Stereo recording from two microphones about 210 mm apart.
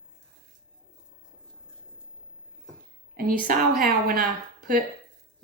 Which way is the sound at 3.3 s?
40° right (ahead or behind).